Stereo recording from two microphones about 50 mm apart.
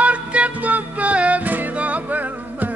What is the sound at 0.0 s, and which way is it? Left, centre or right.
Music, right.